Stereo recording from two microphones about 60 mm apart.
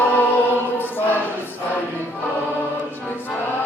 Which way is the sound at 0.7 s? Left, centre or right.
Left.